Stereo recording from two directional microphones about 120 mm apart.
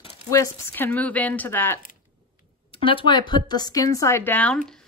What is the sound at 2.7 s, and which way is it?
Speech, 45° left (ahead or behind).